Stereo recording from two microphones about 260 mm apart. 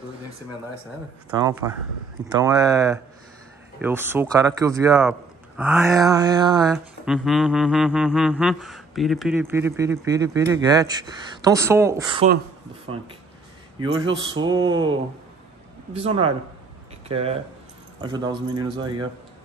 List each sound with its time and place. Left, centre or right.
1.5 s speech: centre
6.7 s speech: centre
13.7 s a man's voice: centre